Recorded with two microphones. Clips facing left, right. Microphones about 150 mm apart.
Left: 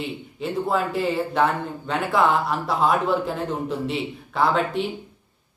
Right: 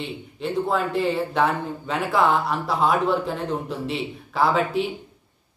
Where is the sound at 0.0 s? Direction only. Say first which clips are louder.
Even; centre (ahead or behind).